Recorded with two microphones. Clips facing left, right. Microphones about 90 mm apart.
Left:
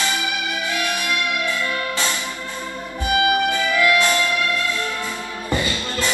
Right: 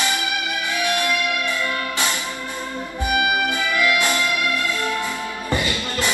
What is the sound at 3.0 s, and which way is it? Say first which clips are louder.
Music: left 2 dB; 20° right (ahead or behind).